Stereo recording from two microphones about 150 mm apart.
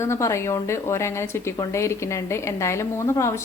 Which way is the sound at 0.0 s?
20° left (ahead or behind).